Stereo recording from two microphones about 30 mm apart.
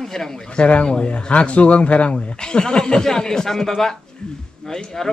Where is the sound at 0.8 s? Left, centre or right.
Left.